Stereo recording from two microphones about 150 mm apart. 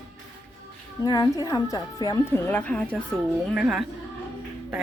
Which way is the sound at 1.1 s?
25° left (ahead or behind).